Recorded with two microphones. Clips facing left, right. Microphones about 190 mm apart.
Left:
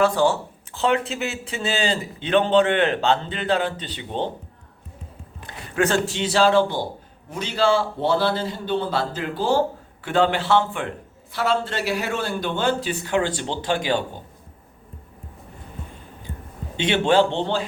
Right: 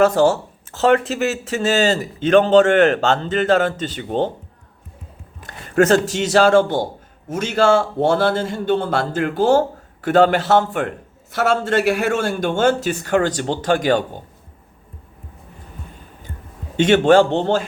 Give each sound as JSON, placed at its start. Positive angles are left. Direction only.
{"t": 0.0, "sound": "a man's voice", "side_deg": -45}
{"t": 5.4, "sound": "a man's voice", "side_deg": -45}
{"t": 16.7, "sound": "a man's voice", "side_deg": -45}